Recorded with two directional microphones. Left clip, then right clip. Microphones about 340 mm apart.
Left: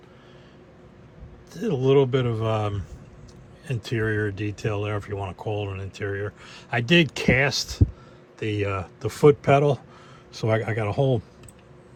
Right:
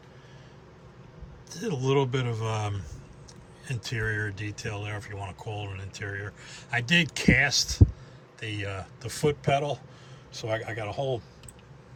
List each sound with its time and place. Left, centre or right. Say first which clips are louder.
1.5 s speech: left 7 dB; centre